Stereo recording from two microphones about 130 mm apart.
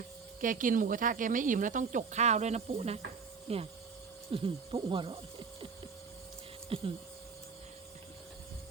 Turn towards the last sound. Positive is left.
turn(degrees=-45)  # may be behind; listen again after turning